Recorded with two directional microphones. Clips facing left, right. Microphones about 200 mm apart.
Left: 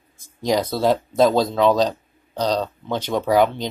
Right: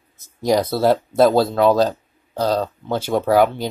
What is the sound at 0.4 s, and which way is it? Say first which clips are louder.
Speech: right 3 dB; 10° right (ahead or behind).